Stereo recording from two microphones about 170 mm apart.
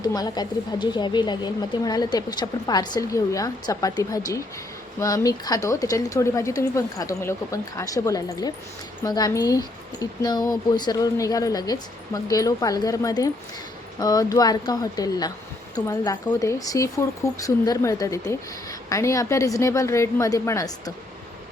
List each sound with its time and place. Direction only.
0.0 s speech: 25° left (ahead or behind)